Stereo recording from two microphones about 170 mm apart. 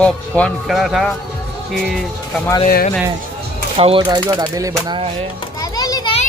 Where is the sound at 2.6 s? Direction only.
55° left (ahead or behind).